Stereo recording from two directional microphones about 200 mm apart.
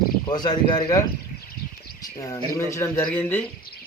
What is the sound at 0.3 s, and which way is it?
Speech, 20° left (ahead or behind).